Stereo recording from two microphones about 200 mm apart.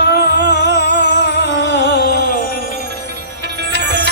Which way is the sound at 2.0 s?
55° right (ahead or behind).